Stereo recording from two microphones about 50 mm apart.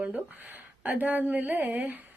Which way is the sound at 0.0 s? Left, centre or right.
Right.